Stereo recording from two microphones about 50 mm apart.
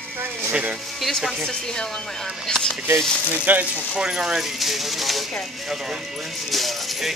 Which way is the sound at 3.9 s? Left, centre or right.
Centre.